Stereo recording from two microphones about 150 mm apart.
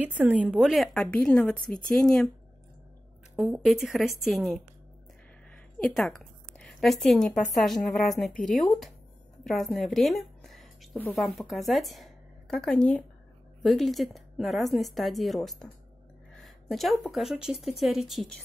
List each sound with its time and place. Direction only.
0.0 s a woman's voice: 10° right (ahead or behind)
3.3 s a woman's voice: 5° right (ahead or behind)
5.8 s a woman's voice: centre (ahead or behind)
9.4 s a sound: centre (ahead or behind)
11.1 s a woman's voice: centre (ahead or behind)